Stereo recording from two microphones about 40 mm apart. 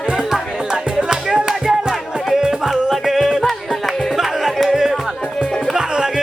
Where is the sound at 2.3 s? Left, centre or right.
Centre.